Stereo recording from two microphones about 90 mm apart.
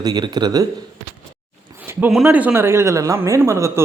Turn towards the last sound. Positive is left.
turn(degrees=-30)  # may be behind; listen again after turning